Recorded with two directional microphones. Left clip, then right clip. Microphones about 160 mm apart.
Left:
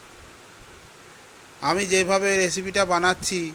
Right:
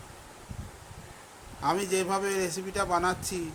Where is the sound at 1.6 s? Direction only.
20° left (ahead or behind).